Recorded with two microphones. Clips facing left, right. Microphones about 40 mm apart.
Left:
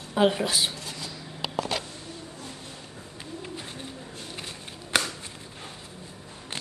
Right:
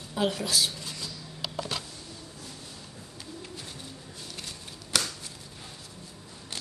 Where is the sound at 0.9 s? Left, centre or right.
Left.